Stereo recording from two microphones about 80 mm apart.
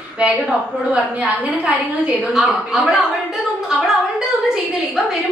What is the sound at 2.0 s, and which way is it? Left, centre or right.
A woman's voice, centre.